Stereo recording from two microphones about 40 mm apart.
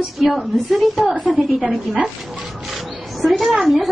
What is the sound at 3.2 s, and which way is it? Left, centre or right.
Speech, centre.